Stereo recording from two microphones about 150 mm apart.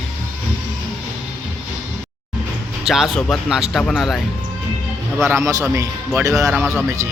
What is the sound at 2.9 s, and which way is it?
Speech, centre (ahead or behind).